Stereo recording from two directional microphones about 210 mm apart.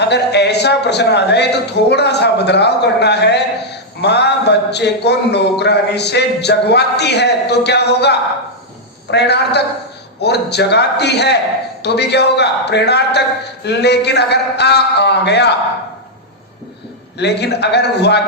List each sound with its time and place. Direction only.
0.0 s a man's voice: 55° left (ahead or behind)
17.2 s a man's voice: 55° left (ahead or behind)